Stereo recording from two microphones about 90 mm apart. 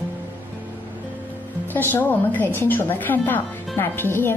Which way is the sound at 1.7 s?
20° left (ahead or behind).